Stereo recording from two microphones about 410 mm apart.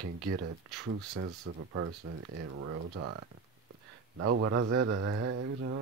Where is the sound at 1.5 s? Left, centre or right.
Right.